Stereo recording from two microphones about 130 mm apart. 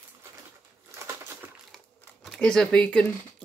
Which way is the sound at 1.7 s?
5° left (ahead or behind).